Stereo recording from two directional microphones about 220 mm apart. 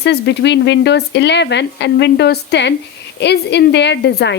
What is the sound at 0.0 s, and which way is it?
Speech, 50° left (ahead or behind).